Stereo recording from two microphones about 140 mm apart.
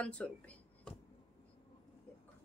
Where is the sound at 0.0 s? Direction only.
10° left (ahead or behind).